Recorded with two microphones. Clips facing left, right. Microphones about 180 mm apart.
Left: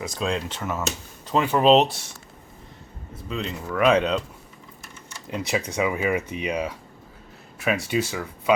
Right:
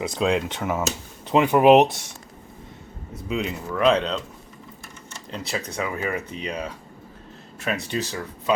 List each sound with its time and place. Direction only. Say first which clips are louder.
0.2 s speech: right 4 dB; 20° right (ahead or behind)
3.2 s speech: right 4 dB; 15° right (ahead or behind)
3.8 s speech: left 1 dB; 10° left (ahead or behind)
5.3 s speech: left 4 dB; 10° left (ahead or behind)